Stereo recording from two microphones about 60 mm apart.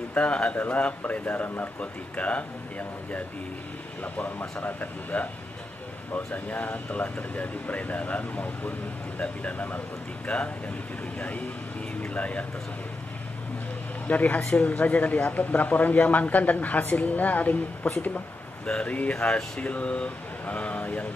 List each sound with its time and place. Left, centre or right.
0.1 s speech: left
4.0 s speech: left
14.0 s speech: left
18.7 s speech: centre
19.1 s speech: centre